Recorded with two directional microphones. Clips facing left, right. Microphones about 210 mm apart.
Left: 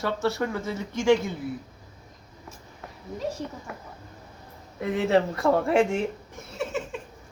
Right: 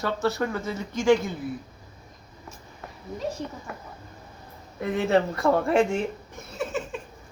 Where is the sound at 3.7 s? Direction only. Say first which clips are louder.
Right 1 dB; 10° left (ahead or behind).